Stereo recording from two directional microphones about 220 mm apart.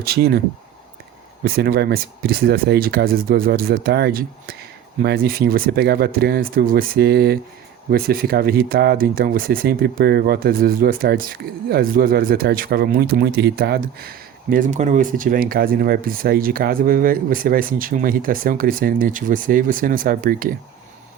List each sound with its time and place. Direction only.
0.0 s speech: 45° right (ahead or behind)
1.5 s speech: 45° right (ahead or behind)